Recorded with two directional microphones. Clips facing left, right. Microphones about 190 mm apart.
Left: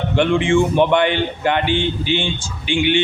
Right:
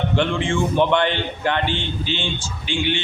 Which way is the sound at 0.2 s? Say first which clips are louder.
Left 8 dB; 15° left (ahead or behind).